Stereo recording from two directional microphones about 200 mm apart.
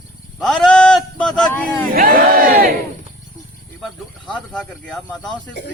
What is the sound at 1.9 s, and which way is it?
Battle cry, 45° right (ahead or behind).